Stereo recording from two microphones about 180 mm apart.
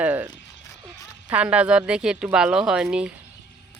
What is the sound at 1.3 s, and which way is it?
Speech, 5° right (ahead or behind).